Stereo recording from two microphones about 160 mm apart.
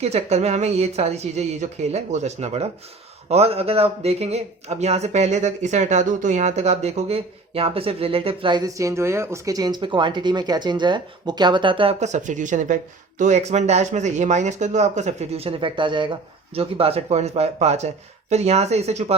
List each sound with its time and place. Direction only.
0.0 s speech: 45° right (ahead or behind)
11.9 s speech: 45° right (ahead or behind)